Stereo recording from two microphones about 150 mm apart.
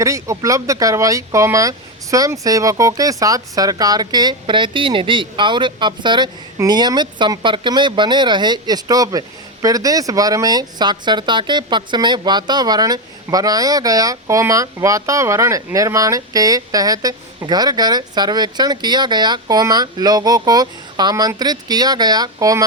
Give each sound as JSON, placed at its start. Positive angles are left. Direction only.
{"t": 0.0, "sound": "speech", "side_deg": -20}